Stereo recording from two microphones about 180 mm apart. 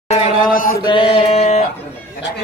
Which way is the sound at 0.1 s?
45° left (ahead or behind).